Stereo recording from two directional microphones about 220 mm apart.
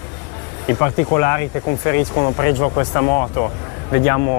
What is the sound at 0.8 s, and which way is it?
Speech, 15° left (ahead or behind).